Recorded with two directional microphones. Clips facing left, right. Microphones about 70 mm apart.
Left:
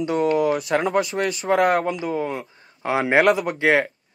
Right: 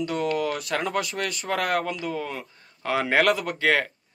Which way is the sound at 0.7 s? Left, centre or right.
Centre.